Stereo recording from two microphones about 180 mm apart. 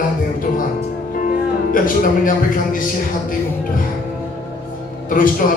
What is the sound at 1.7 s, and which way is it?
Speech, 50° left (ahead or behind).